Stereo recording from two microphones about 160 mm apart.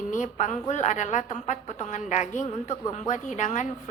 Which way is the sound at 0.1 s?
50° left (ahead or behind).